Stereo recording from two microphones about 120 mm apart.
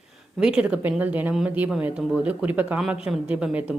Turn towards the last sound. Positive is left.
turn(degrees=-10)  # may be behind; listen again after turning